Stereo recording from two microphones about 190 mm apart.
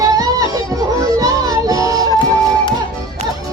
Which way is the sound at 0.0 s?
20° right (ahead or behind).